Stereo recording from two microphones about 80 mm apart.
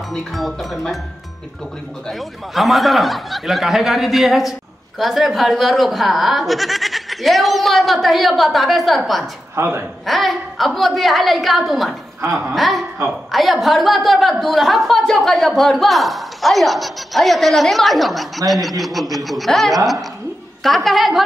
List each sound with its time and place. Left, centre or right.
0.1 s speech: centre
2.0 s speech: centre
9.6 s a man's voice: right
10.0 s speech: centre
12.3 s speech: centre
12.5 s speech: centre